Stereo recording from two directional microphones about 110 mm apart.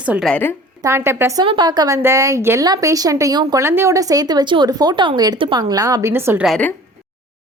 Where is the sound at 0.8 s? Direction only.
25° right (ahead or behind).